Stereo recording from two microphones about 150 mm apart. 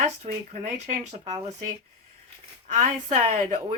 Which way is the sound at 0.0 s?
50° right (ahead or behind).